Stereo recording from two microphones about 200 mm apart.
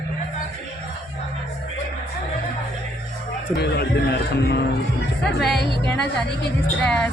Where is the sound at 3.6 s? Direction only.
55° left (ahead or behind).